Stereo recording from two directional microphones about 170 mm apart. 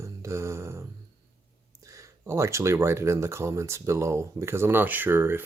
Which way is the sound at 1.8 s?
20° right (ahead or behind).